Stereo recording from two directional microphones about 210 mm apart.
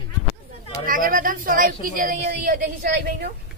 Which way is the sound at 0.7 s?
40° right (ahead or behind).